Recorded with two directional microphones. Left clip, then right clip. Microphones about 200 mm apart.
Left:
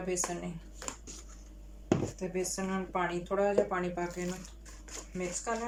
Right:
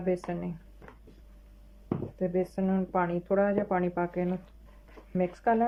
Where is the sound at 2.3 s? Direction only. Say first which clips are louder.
Right 6 dB; 45° right (ahead or behind).